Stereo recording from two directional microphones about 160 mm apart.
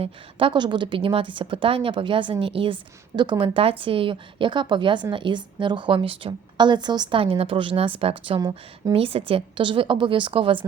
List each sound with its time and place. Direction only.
0.0 s a woman's voice: 35° right (ahead or behind)